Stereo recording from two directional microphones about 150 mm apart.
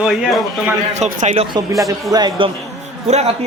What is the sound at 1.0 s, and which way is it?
Speech, 50° right (ahead or behind).